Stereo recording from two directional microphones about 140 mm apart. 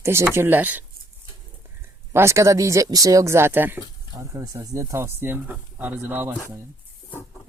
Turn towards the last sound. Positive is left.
turn(degrees=-15)  # may be behind; listen again after turning